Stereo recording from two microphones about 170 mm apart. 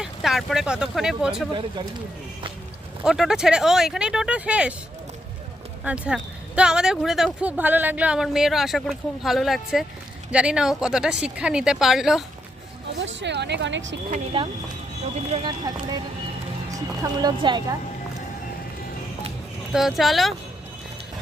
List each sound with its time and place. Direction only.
0.0 s speech: centre (ahead or behind)
3.0 s speech: 5° right (ahead or behind)
5.8 s speech: 5° right (ahead or behind)
13.0 s speech: 90° right
14.3 s speech: 35° right (ahead or behind)
17.0 s a woman's voice: 25° right (ahead or behind)
19.7 s speech: centre (ahead or behind)